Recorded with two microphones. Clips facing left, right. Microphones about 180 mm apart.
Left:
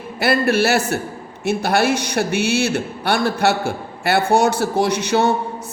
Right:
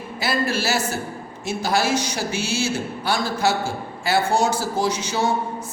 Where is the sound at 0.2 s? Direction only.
60° left (ahead or behind).